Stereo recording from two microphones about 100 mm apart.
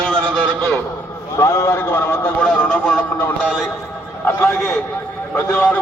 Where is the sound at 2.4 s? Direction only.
10° left (ahead or behind).